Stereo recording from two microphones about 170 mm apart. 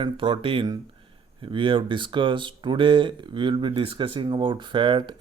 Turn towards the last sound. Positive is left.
turn(degrees=-30)  # may be behind; listen again after turning